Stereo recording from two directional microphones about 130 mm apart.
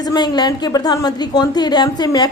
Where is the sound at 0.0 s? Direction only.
30° left (ahead or behind).